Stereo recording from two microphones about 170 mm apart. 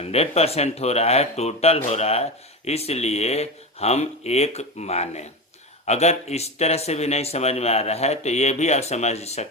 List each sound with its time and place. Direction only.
0.0 s speech: 35° left (ahead or behind)